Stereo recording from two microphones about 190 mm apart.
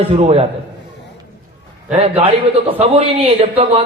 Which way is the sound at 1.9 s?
35° right (ahead or behind).